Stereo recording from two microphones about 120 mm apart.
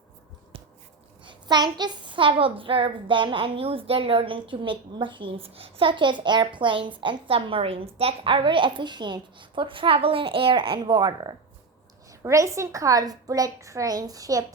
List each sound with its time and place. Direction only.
1.2 s a woman's voice: 40° right (ahead or behind)
12.2 s a woman's voice: 25° right (ahead or behind)